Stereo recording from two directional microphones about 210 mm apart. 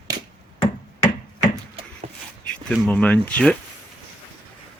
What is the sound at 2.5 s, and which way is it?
Speech, 5° left (ahead or behind).